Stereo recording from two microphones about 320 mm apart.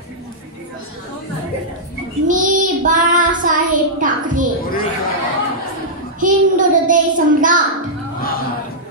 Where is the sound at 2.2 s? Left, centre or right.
Right.